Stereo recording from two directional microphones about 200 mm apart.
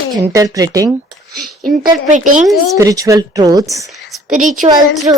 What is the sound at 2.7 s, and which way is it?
A woman's voice, 15° right (ahead or behind).